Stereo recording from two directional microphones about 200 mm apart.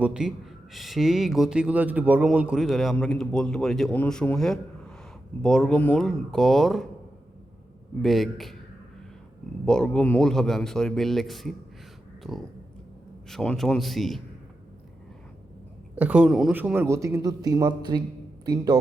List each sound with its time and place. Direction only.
0.0 s speech: 5° right (ahead or behind)
8.0 s speech: centre (ahead or behind)
9.6 s speech: 5° left (ahead or behind)
16.0 s a man's voice: 5° right (ahead or behind)